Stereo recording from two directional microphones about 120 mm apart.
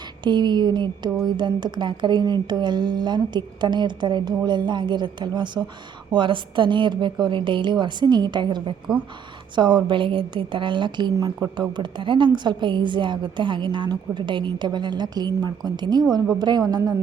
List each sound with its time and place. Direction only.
0.3 s a woman's voice: 40° right (ahead or behind)